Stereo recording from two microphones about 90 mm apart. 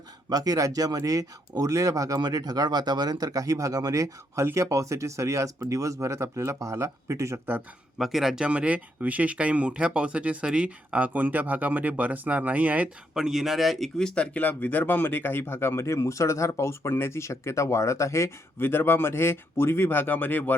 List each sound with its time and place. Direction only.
0.3 s speech: 45° right (ahead or behind); by 7.6 s 30° right (ahead or behind)
7.9 s speech: centre (ahead or behind)
13.1 s speech: 5° right (ahead or behind); by 20.6 s 20° left (ahead or behind)